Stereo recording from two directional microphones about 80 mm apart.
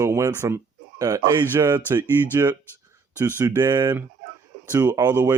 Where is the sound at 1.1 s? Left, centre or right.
Right.